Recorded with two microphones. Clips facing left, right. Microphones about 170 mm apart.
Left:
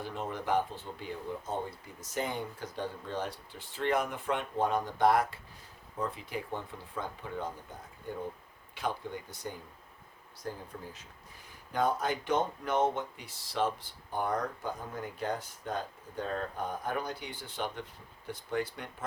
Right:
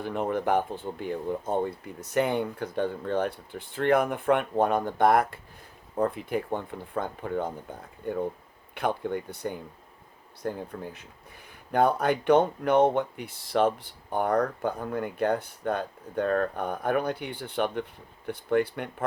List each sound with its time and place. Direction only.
0.0 s speech: 60° right (ahead or behind)
8.7 s speech: 60° right (ahead or behind)